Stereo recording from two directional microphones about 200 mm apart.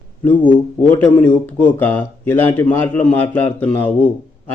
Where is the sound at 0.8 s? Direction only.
10° left (ahead or behind).